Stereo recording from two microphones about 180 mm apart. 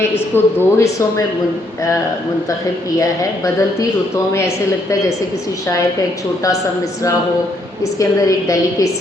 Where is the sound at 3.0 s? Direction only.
20° left (ahead or behind).